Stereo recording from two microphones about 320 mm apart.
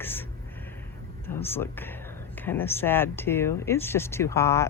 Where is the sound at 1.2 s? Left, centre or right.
Centre.